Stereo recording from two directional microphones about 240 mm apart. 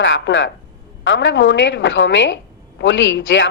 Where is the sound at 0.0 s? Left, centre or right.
Left.